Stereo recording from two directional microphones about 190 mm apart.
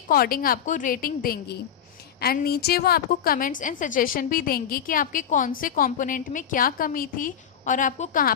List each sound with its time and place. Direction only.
0.1 s a woman's voice: 50° left (ahead or behind)